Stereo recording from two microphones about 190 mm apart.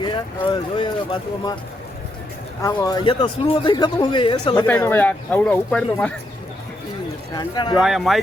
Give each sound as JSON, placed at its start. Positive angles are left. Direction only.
{"t": 0.0, "sound": "speech", "side_deg": 25}
{"t": 2.6, "sound": "speech", "side_deg": 20}
{"t": 4.8, "sound": "speech", "side_deg": 10}
{"t": 7.3, "sound": "speech", "side_deg": 25}
{"t": 7.8, "sound": "speech", "side_deg": 0}